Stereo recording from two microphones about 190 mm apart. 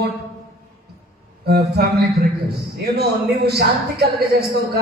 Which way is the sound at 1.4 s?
55° right (ahead or behind).